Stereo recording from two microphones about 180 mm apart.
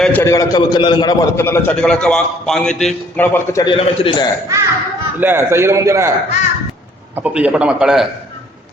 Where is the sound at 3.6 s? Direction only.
30° left (ahead or behind).